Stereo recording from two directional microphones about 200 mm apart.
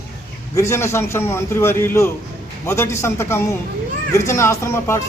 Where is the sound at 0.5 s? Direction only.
15° left (ahead or behind).